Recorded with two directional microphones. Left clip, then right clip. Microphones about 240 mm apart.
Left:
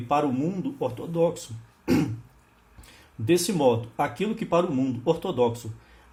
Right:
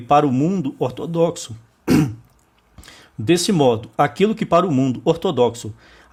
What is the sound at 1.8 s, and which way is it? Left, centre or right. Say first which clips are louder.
Music: right 7 dB; right.